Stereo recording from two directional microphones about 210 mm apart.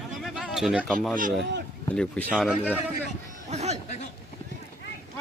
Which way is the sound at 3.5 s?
30° right (ahead or behind).